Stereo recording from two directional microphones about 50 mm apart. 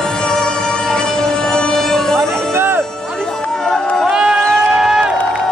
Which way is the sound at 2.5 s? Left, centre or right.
Right.